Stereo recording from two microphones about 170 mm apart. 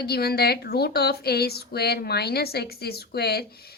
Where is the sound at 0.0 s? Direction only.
65° left (ahead or behind).